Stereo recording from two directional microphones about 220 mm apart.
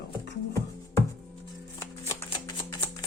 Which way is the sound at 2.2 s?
15° left (ahead or behind).